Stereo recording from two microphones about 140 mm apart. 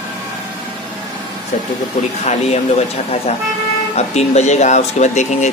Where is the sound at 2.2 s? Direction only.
50° left (ahead or behind).